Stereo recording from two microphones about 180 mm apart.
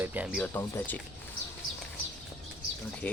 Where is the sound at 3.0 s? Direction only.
10° left (ahead or behind).